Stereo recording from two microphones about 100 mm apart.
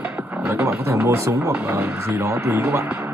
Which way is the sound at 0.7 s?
25° right (ahead or behind).